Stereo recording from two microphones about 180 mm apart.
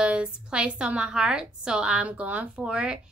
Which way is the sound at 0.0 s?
5° right (ahead or behind).